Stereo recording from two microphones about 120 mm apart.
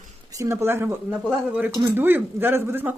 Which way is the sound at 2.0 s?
15° right (ahead or behind).